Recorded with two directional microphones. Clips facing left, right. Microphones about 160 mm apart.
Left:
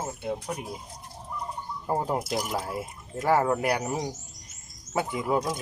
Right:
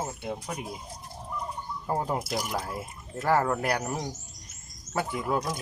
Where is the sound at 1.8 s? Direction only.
5° left (ahead or behind).